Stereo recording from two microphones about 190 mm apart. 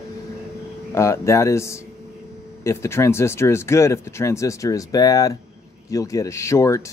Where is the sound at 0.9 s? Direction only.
15° left (ahead or behind).